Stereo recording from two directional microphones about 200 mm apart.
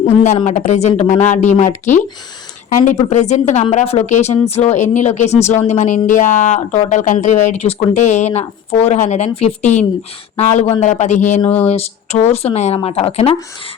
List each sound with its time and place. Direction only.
0.0 s a woman's voice: 30° left (ahead or behind)